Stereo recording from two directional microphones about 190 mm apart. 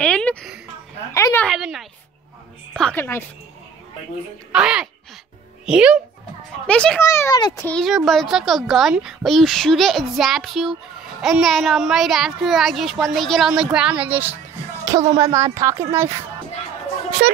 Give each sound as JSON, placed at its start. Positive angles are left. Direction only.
{"t": 0.0, "sound": "a sound", "side_deg": 5}
{"t": 1.5, "sound": "a child's voice", "side_deg": 0}
{"t": 4.5, "sound": "a child's voice", "side_deg": -5}
{"t": 6.7, "sound": "a child's voice", "side_deg": 5}
{"t": 7.1, "sound": "a woman's voice", "side_deg": 15}
{"t": 7.6, "sound": "a child's voice", "side_deg": 5}
{"t": 14.9, "sound": "a woman's voice", "side_deg": -20}